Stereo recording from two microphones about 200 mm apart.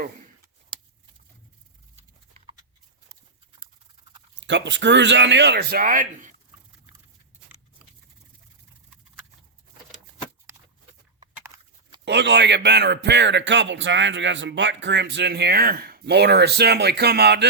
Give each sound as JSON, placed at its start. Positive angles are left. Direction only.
{"t": 4.4, "sound": "speech", "side_deg": -65}
{"t": 11.3, "sound": "a sound", "side_deg": -15}
{"t": 12.0, "sound": "speech", "side_deg": -60}